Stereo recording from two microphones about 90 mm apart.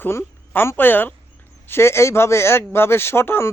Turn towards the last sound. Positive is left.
turn(degrees=25)  # may be behind; listen again after turning